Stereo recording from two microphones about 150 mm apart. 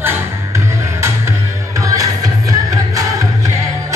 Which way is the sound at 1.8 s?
25° right (ahead or behind).